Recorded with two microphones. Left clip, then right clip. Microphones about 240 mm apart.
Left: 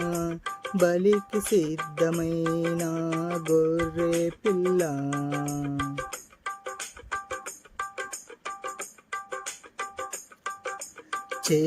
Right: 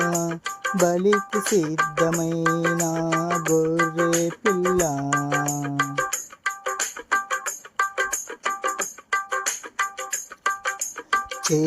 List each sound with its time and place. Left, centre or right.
0.3 s music: right